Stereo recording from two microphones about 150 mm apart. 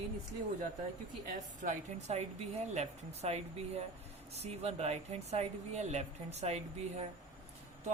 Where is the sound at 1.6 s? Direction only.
45° right (ahead or behind).